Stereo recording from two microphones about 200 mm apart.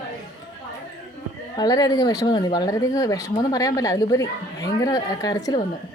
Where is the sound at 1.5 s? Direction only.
20° left (ahead or behind).